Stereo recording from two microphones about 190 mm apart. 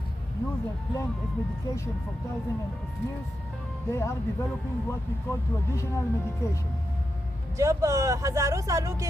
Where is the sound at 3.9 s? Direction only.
15° left (ahead or behind).